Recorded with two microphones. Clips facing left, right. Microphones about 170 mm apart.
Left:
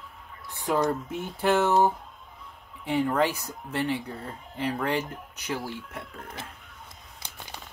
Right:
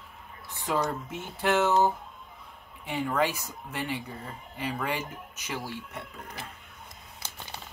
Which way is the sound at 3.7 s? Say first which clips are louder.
Left 5 dB; 10° right (ahead or behind).